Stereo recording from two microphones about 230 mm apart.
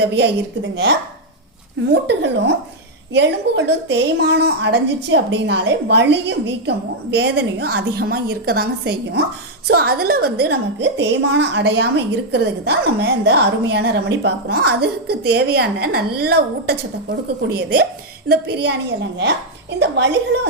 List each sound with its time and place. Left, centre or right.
0.0 s a woman's voice: right
1.9 s a woman's voice: right
19.8 s a woman's voice: right